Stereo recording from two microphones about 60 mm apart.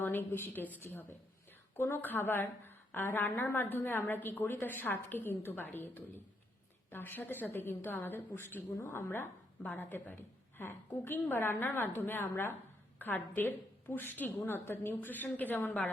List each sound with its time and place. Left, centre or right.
0.0 s a woman's voice: left